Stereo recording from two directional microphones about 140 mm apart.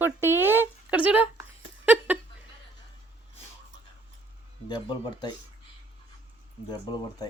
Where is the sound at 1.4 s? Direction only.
10° right (ahead or behind).